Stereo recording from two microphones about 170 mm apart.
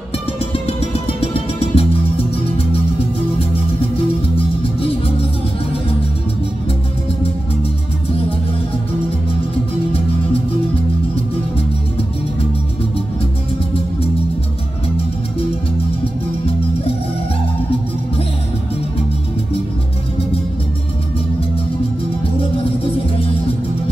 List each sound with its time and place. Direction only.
0.7 s music: 35° left (ahead or behind)